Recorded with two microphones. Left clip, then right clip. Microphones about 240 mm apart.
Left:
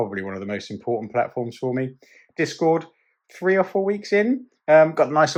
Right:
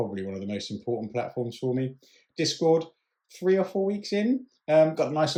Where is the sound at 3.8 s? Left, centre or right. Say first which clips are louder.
Left 7 dB; left.